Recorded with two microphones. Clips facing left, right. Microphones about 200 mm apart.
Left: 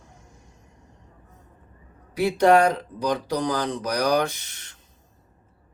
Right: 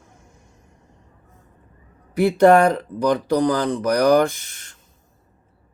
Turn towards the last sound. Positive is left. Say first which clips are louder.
# right 3 dB
turn(degrees=-50)  # may be behind; listen again after turning